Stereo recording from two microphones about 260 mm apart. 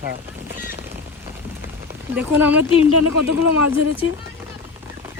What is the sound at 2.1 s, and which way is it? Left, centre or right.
Speech, centre.